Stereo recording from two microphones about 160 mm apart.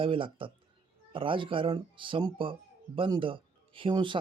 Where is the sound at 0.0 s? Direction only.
35° right (ahead or behind).